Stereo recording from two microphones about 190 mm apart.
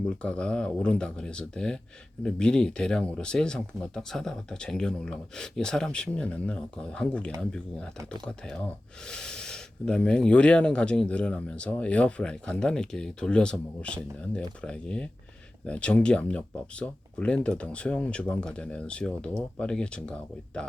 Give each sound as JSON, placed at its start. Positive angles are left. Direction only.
{"t": 0.2, "sound": "speech", "side_deg": 5}